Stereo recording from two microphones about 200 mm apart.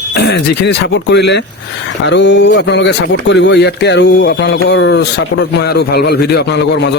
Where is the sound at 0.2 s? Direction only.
55° left (ahead or behind).